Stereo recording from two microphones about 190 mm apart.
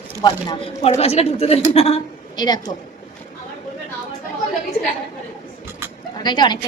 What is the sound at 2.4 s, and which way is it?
Speech, 20° left (ahead or behind).